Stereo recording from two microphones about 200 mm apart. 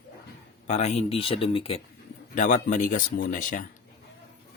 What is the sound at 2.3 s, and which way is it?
A man's voice, 40° left (ahead or behind).